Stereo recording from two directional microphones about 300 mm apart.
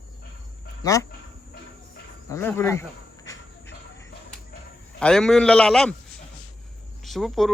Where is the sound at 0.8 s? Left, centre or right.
Centre.